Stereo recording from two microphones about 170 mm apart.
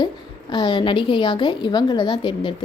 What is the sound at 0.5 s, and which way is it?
A woman's voice, 25° left (ahead or behind).